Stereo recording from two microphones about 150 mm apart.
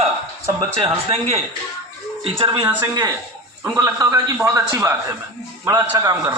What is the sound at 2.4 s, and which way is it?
A man's voice, 30° right (ahead or behind).